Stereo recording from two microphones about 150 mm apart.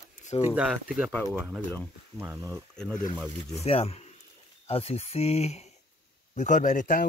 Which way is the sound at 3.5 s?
45° left (ahead or behind).